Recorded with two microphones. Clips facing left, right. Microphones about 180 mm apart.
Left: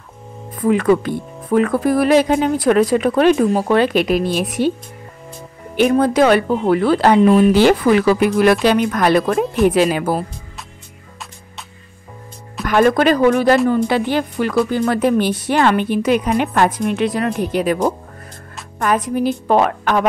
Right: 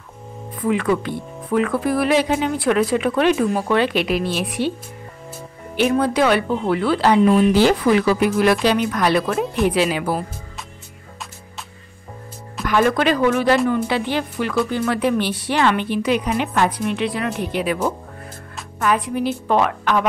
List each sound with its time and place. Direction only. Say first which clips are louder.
0.7 s speech: left 5 dB; 45° left (ahead or behind)
5.8 s speech: left 4 dB; 45° left (ahead or behind)
12.6 s speech: left 4 dB; 50° left (ahead or behind)